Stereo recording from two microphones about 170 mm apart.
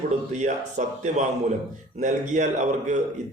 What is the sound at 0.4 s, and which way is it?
Speech, 45° right (ahead or behind).